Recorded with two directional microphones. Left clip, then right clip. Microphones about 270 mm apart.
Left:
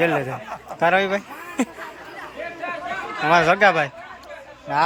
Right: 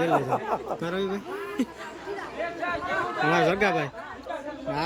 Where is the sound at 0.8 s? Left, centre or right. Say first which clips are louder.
Left 12 dB; centre.